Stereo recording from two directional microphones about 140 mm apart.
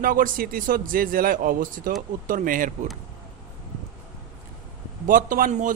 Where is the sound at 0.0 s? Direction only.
85° right.